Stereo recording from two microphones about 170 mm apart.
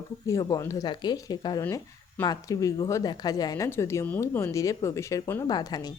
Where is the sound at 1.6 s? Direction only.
15° left (ahead or behind).